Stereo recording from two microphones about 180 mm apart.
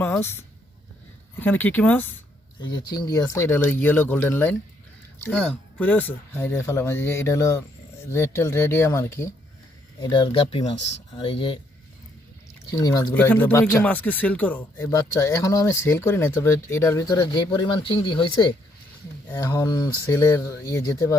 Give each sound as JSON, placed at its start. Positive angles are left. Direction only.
{"t": 0.0, "sound": "speech", "side_deg": 10}
{"t": 2.6, "sound": "speech", "side_deg": 25}
{"t": 10.0, "sound": "speech", "side_deg": 25}
{"t": 12.7, "sound": "speech", "side_deg": 20}
{"t": 13.1, "sound": "speech", "side_deg": 10}
{"t": 19.3, "sound": "speech", "side_deg": 15}